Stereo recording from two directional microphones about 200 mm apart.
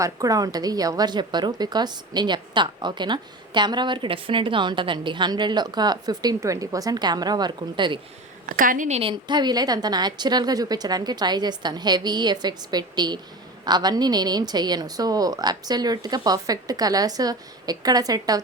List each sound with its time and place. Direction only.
0.0 s a woman's voice: 15° right (ahead or behind)
8.4 s a woman's voice: 45° right (ahead or behind); by 18.3 s 20° right (ahead or behind)